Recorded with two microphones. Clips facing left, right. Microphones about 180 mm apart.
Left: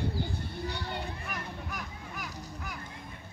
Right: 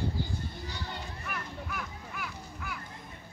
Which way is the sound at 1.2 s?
40° left (ahead or behind).